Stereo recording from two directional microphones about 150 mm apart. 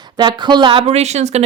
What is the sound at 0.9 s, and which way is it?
Speech, 45° right (ahead or behind).